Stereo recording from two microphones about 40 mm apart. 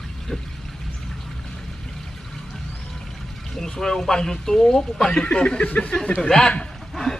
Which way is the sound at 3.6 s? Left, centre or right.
Centre.